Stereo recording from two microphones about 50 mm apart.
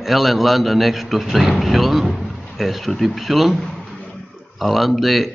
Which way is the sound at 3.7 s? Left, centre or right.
Centre.